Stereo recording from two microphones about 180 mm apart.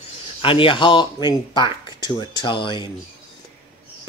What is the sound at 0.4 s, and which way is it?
Speech, 30° left (ahead or behind).